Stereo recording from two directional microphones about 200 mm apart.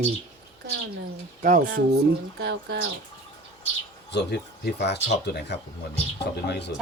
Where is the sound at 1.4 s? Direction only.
40° right (ahead or behind).